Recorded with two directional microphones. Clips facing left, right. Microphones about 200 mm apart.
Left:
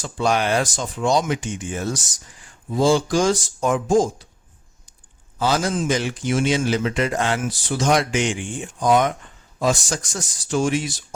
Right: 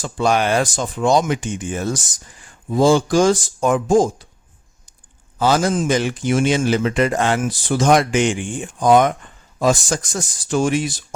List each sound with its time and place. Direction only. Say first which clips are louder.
0.0 s a man's voice: right 3 dB; 50° right (ahead or behind)
5.4 s a man's voice: right 4 dB; 50° right (ahead or behind)